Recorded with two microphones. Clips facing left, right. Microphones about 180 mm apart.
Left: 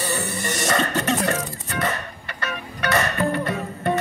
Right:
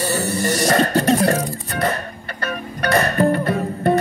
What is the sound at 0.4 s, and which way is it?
Music, 35° right (ahead or behind).